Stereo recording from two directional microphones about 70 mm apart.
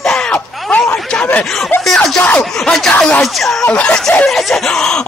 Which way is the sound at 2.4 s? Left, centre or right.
Centre.